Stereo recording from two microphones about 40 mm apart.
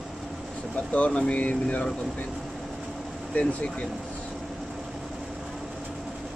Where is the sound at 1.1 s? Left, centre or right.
Left.